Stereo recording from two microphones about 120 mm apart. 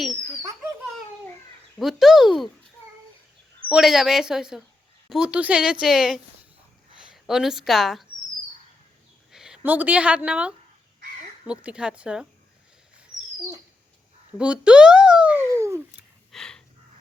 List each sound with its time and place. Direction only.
1.8 s a woman's voice: centre (ahead or behind)
3.7 s a woman's voice: 5° right (ahead or behind)
9.3 s a woman's voice: 5° right (ahead or behind)
14.3 s speech: 10° right (ahead or behind)
15.4 s a sound: 25° right (ahead or behind)
16.3 s a sound: 5° left (ahead or behind)